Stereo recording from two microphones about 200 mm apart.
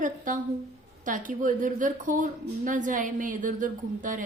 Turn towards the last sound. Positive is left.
turn(degrees=-40)  # may be behind; listen again after turning